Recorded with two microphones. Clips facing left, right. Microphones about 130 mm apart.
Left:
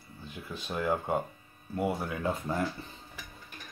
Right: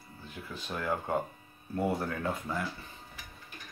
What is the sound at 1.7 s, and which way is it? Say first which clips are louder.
Speech: even; 5° left (ahead or behind).